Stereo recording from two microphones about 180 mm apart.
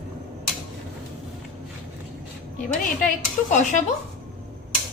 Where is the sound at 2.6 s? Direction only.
45° left (ahead or behind).